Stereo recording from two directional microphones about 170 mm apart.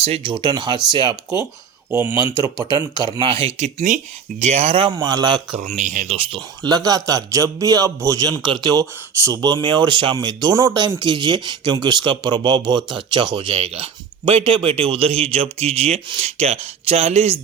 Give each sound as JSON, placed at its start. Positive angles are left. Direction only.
{"t": 0.0, "sound": "speech", "side_deg": -35}
{"t": 4.9, "sound": "speech", "side_deg": -25}
{"t": 5.5, "sound": "speech", "side_deg": -45}